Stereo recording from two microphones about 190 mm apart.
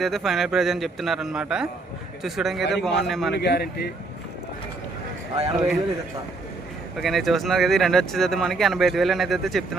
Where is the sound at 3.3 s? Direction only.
60° left (ahead or behind).